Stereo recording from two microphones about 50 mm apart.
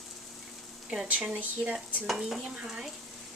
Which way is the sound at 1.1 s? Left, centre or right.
Right.